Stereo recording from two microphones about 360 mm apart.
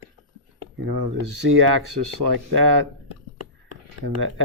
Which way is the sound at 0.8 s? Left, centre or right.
Right.